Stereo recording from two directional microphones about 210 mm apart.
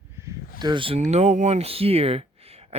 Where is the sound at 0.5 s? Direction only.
20° right (ahead or behind).